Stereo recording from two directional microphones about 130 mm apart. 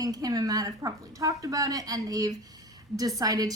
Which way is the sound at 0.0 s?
30° right (ahead or behind).